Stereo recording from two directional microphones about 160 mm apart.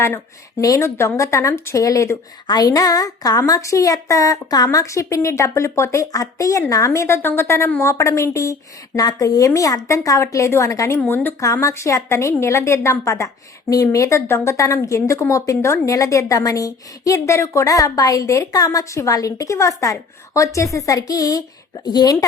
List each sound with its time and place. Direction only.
0.6 s a woman's voice: 20° left (ahead or behind)